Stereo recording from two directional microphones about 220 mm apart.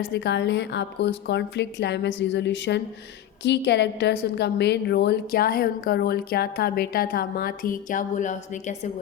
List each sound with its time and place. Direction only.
0.1 s a woman's voice: 50° left (ahead or behind); by 8.9 s 35° left (ahead or behind)